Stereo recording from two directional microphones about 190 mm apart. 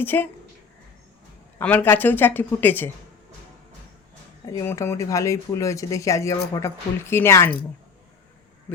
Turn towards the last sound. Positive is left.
turn(degrees=10)  # may be behind; listen again after turning